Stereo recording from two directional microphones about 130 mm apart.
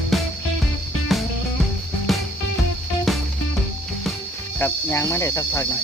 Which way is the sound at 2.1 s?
Centre (ahead or behind).